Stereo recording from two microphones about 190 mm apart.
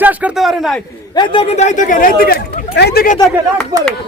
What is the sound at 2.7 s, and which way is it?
Speech, 60° left (ahead or behind).